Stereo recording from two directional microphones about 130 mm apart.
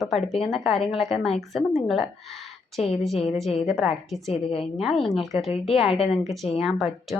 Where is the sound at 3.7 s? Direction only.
Centre (ahead or behind).